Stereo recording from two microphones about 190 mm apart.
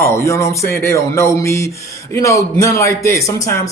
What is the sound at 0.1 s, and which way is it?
A man's voice, 15° left (ahead or behind).